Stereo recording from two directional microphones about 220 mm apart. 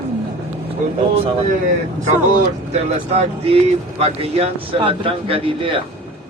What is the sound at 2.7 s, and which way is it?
Speech, 30° right (ahead or behind).